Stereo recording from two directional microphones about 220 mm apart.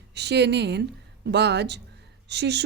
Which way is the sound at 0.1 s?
50° right (ahead or behind).